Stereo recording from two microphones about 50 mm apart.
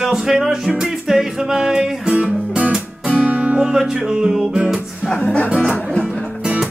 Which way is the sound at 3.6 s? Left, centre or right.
Centre.